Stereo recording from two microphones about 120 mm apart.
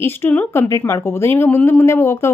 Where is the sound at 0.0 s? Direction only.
20° left (ahead or behind).